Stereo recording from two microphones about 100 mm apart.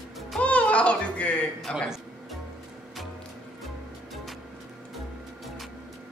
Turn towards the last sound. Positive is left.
turn(degrees=0)  # may be behind; listen again after turning